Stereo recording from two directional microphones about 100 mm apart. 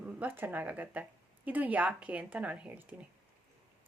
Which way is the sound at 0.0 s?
20° right (ahead or behind).